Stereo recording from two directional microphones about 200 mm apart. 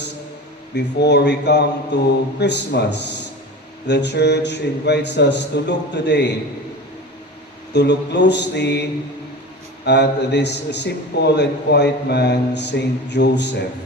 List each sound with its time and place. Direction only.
0.8 s a man's voice: 55° left (ahead or behind)
7.7 s a man's voice: 60° left (ahead or behind)